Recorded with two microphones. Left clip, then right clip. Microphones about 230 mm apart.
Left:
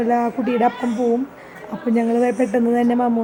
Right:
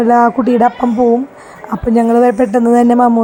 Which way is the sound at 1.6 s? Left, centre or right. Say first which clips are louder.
Right 8 dB; right.